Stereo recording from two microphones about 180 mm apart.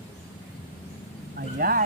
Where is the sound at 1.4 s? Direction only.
55° right (ahead or behind).